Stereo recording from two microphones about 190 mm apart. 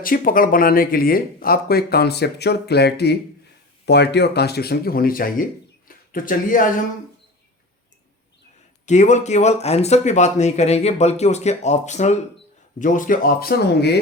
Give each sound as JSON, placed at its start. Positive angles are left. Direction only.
{"t": 0.0, "sound": "speech", "side_deg": 45}
{"t": 8.9, "sound": "speech", "side_deg": 40}